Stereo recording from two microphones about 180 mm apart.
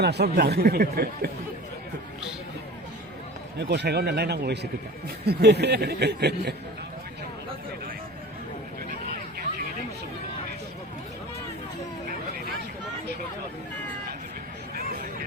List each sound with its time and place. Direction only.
0.0 s speech: 65° right (ahead or behind)
3.6 s a man's voice: 70° right (ahead or behind)